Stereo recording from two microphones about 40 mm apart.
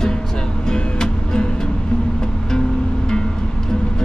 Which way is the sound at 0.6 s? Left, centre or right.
Centre.